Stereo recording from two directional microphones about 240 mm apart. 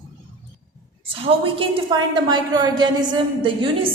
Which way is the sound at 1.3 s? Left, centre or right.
Right.